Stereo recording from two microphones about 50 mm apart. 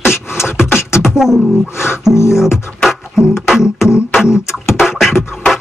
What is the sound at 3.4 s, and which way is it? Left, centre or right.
Beatboxing, centre.